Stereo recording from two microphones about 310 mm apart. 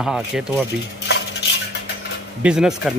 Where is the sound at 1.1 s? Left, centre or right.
Left.